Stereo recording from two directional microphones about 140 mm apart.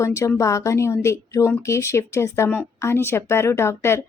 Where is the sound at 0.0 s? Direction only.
20° left (ahead or behind).